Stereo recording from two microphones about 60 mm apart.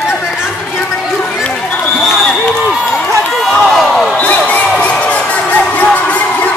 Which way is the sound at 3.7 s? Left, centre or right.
Centre.